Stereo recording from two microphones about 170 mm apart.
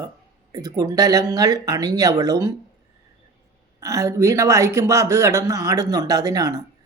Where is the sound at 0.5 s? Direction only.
20° right (ahead or behind).